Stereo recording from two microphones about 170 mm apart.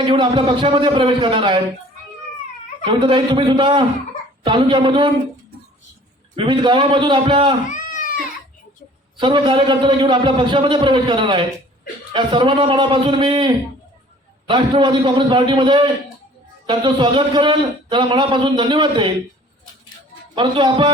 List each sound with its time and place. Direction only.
0.0 s a man's voice: 30° right (ahead or behind)
2.8 s a man's voice: 30° right (ahead or behind)
6.3 s a man's voice: 30° right (ahead or behind)
7.7 s cat: 50° left (ahead or behind)
9.1 s a man's voice: 30° right (ahead or behind)
20.3 s a man's voice: 30° right (ahead or behind)